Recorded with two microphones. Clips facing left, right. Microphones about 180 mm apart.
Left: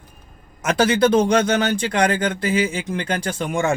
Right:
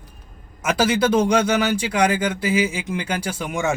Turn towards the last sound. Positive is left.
turn(degrees=-5)  # may be behind; listen again after turning